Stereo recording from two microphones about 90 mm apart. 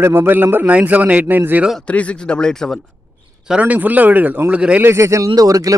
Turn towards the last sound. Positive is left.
turn(degrees=-40)  # may be behind; listen again after turning